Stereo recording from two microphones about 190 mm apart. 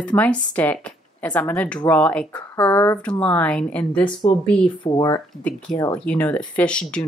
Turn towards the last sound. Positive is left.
turn(degrees=5)  # may be behind; listen again after turning